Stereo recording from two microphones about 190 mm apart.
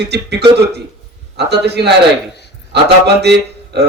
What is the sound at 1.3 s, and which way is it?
Speech, 60° right (ahead or behind).